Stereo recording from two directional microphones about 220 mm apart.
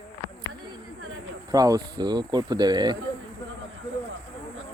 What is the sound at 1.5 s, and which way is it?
Speech, 15° right (ahead or behind).